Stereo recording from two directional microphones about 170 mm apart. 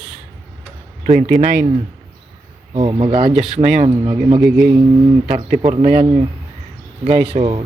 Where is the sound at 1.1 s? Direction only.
50° right (ahead or behind).